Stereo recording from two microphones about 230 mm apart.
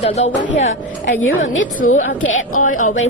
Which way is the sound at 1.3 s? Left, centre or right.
Left.